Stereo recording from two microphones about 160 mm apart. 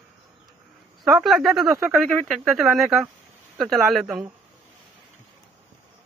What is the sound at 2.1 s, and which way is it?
Speech, centre (ahead or behind).